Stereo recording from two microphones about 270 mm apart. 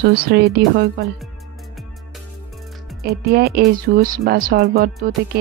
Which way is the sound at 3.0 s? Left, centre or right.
Right.